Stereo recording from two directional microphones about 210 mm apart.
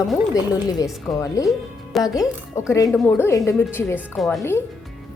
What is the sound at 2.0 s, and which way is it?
Speech, 15° left (ahead or behind).